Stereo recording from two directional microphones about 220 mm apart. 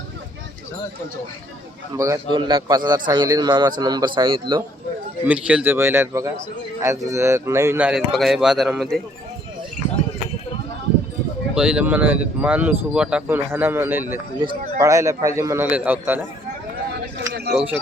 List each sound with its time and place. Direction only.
2.0 s a man's voice: 15° right (ahead or behind)
5.2 s speech: 5° right (ahead or behind)
11.5 s speech: 5° right (ahead or behind)
17.5 s speech: 5° right (ahead or behind)